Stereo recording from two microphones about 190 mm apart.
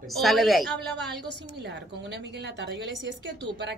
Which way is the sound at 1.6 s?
65° right (ahead or behind).